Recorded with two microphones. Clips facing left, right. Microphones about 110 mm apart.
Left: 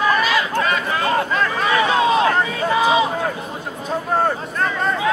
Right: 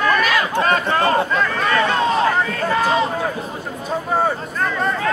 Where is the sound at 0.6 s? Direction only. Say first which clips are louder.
Right 3 dB; 40° right (ahead or behind).